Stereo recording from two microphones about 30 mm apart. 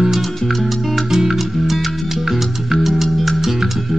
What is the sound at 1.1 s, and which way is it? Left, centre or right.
Music, centre.